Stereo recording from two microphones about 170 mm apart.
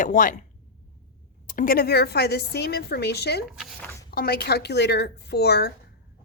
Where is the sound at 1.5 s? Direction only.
55° left (ahead or behind).